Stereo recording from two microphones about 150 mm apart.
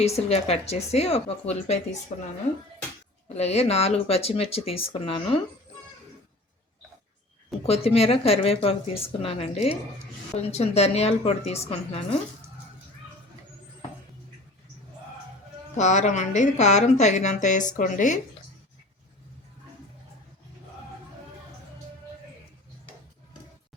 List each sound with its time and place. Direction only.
0.0 s a woman's voice: 45° left (ahead or behind)
3.3 s speech: 45° left (ahead or behind)
7.6 s a woman's voice: 40° left (ahead or behind)
15.7 s a woman's voice: 50° left (ahead or behind)